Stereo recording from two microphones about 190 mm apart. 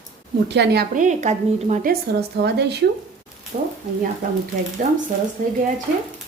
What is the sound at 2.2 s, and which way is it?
Speech, 60° right (ahead or behind).